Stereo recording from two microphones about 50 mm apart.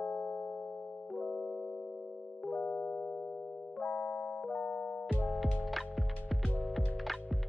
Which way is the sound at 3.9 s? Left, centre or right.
Centre.